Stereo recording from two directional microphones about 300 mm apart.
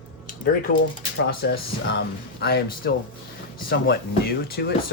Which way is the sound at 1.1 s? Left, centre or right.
Left.